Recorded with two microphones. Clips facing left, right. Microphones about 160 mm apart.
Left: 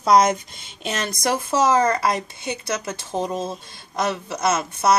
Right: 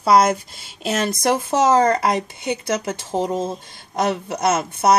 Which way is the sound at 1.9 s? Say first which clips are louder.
Right 3 dB; 20° right (ahead or behind).